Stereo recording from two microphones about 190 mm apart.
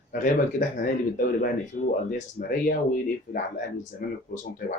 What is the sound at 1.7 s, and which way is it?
Speech, 45° left (ahead or behind).